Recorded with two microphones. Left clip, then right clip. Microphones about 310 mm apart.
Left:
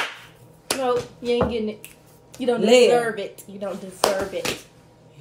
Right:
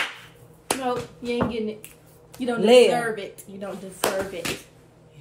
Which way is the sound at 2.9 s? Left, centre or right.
Centre.